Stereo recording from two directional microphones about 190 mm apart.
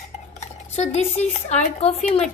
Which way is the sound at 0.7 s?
35° left (ahead or behind).